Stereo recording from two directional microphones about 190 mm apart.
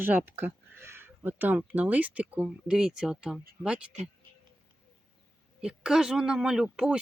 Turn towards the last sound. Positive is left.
turn(degrees=-5)  # may be behind; listen again after turning